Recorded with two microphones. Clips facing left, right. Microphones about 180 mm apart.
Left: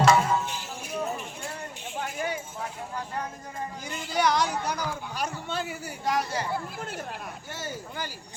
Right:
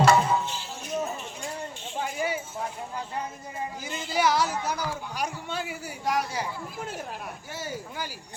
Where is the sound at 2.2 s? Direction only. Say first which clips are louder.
Right 2 dB; 10° right (ahead or behind).